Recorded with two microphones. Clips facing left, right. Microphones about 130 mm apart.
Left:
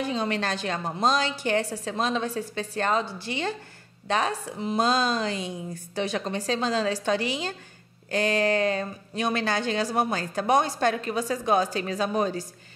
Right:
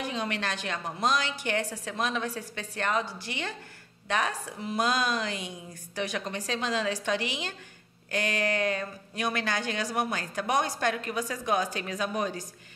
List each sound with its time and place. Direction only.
0.0 s a woman's voice: 30° left (ahead or behind)